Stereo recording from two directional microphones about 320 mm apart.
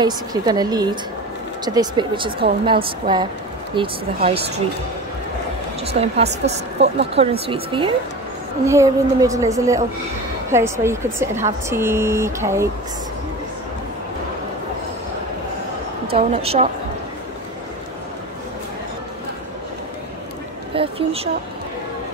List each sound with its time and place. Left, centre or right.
0.0 s a woman's voice: centre
5.9 s a woman's voice: centre
16.1 s a woman's voice: centre
20.7 s a sound: centre